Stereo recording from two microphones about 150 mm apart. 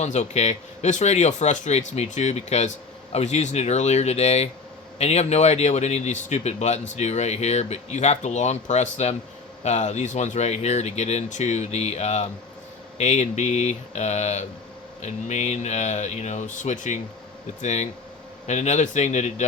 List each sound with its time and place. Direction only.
0.0 s a man's voice: 50° left (ahead or behind)